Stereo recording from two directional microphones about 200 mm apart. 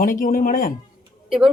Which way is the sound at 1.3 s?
Centre (ahead or behind).